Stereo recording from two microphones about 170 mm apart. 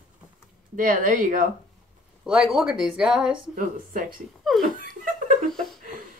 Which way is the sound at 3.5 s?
55° right (ahead or behind).